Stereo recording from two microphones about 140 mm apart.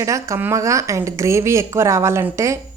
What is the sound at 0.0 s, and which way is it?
A woman's voice, 20° right (ahead or behind).